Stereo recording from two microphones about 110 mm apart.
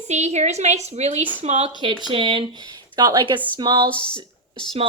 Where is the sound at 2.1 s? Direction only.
50° right (ahead or behind).